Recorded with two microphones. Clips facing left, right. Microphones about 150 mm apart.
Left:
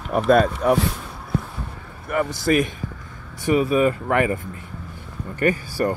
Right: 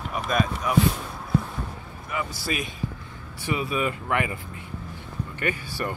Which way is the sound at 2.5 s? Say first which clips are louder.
Left 13 dB; 55° left (ahead or behind).